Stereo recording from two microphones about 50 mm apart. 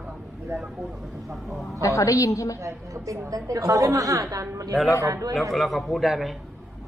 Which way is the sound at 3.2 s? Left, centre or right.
Right.